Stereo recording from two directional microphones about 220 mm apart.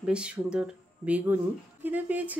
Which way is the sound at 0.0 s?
5° right (ahead or behind).